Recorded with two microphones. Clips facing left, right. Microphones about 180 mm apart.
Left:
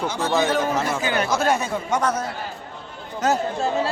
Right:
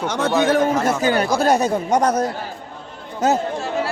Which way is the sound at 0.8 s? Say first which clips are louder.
Right 5 dB; 40° right (ahead or behind).